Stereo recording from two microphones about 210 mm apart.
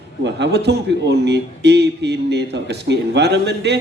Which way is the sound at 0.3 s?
55° right (ahead or behind).